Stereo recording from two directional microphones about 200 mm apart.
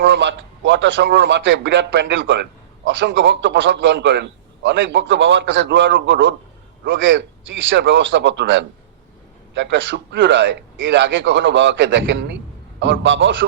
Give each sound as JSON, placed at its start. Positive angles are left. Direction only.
{"t": 0.0, "sound": "a man's voice", "side_deg": -65}